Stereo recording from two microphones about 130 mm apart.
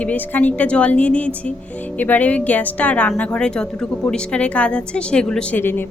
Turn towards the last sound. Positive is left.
turn(degrees=15)  # may be behind; listen again after turning